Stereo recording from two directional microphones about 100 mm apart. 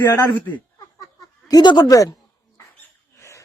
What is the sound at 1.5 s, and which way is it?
Speech, 45° left (ahead or behind).